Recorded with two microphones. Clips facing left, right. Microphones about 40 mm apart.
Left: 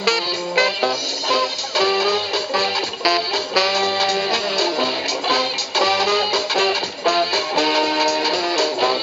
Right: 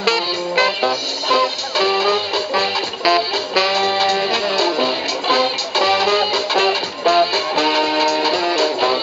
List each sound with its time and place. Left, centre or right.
0.0 s music: right